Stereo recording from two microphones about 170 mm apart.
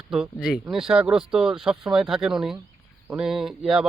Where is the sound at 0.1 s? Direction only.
5° right (ahead or behind).